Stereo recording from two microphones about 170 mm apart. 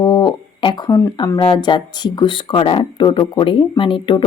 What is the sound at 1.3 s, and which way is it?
Speech, 30° left (ahead or behind).